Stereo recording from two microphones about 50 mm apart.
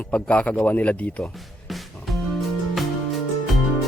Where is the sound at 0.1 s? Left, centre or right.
Left.